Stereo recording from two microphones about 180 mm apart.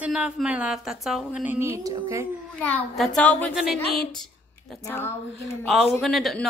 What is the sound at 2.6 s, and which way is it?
A woman's voice, 5° left (ahead or behind).